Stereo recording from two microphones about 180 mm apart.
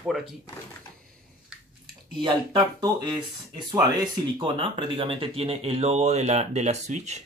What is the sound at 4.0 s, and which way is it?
Speech, 25° right (ahead or behind).